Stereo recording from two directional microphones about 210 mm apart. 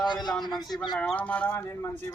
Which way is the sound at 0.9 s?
5° left (ahead or behind).